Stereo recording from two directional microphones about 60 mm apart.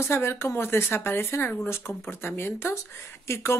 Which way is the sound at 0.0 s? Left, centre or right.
Left.